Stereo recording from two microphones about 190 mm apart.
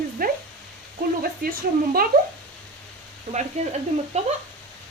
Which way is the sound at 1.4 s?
50° right (ahead or behind).